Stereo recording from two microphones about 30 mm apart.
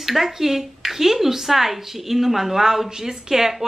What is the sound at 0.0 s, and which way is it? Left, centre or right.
A woman's voice, centre.